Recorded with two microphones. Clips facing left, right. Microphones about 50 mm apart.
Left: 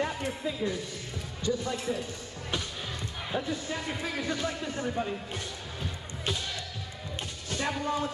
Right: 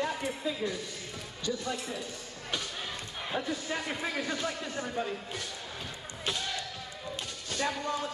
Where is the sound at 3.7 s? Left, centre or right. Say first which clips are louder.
Even; right.